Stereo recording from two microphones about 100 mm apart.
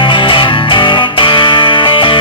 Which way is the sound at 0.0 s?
55° left (ahead or behind).